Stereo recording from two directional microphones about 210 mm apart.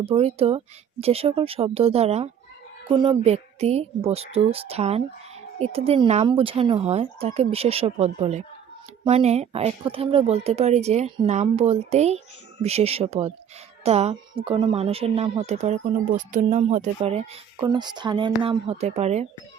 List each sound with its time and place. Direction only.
0.0 s speech: 30° right (ahead or behind)